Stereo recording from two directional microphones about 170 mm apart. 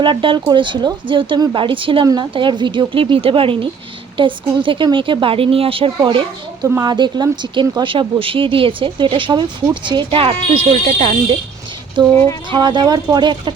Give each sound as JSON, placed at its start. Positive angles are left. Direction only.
{"t": 0.0, "sound": "speech", "side_deg": -30}
{"t": 12.1, "sound": "speech", "side_deg": 15}
{"t": 12.5, "sound": "speech", "side_deg": -25}